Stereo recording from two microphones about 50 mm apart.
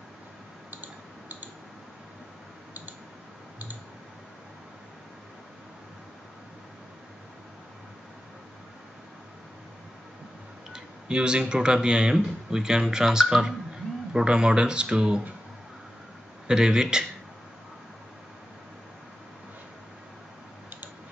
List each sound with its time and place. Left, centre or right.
10.7 s speech: centre
16.4 s speech: centre